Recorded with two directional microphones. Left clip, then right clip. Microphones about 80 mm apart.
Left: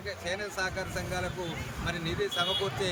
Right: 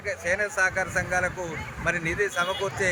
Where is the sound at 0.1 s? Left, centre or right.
Right.